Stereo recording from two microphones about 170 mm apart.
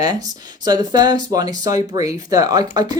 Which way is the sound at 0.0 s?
20° right (ahead or behind).